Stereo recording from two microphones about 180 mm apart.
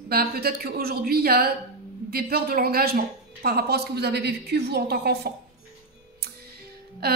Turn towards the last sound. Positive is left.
turn(degrees=-60)  # may be behind; listen again after turning